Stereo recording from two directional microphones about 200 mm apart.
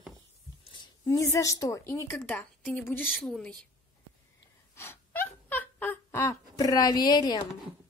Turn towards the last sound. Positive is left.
turn(degrees=20)  # may be behind; listen again after turning